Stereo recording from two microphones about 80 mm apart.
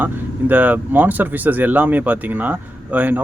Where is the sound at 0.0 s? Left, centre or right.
Right.